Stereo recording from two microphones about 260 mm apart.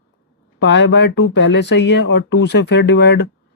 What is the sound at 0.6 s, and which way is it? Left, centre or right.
Speech, left.